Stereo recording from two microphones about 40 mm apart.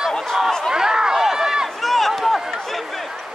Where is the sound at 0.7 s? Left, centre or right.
Centre.